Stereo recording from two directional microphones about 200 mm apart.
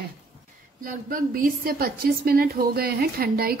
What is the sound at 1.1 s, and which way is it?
A woman's voice, 45° right (ahead or behind).